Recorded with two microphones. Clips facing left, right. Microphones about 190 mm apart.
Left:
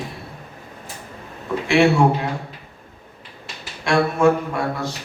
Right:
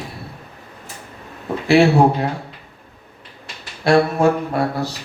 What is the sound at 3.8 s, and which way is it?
A man's voice, 35° right (ahead or behind).